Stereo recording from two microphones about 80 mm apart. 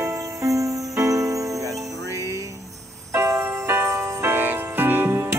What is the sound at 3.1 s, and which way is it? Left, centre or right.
Jingle bell, right.